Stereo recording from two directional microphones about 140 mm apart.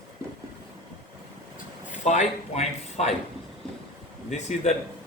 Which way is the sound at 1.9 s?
60° left (ahead or behind).